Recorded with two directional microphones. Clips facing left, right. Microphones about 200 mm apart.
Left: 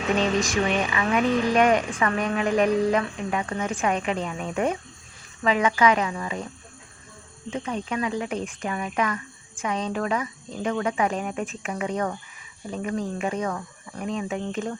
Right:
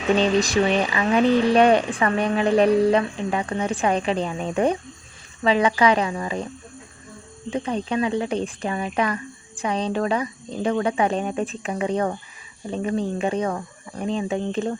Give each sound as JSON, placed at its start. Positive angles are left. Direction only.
{"t": 0.2, "sound": "speech", "side_deg": -35}
{"t": 7.5, "sound": "speech", "side_deg": -35}